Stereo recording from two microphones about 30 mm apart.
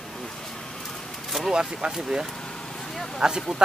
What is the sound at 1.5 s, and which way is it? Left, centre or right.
Speech, right.